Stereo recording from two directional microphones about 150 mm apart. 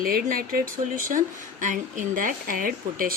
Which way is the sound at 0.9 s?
60° right (ahead or behind).